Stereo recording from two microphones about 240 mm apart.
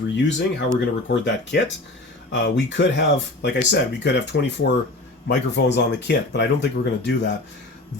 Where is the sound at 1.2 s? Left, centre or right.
Left.